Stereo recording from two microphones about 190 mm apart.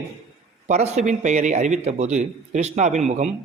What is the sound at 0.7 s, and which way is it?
A man's voice, 35° right (ahead or behind).